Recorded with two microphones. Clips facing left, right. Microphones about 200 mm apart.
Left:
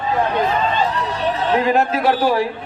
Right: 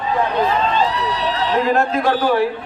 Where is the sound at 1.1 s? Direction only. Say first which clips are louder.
Left 1 dB; 50° left (ahead or behind).